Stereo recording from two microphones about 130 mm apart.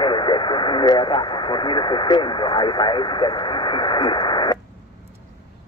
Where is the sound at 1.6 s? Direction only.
35° left (ahead or behind).